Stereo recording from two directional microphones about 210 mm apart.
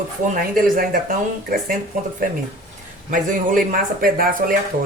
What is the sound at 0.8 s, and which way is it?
Speech, 40° right (ahead or behind).